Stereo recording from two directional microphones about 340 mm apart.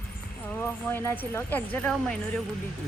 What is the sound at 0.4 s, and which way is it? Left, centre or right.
A man's voice, centre.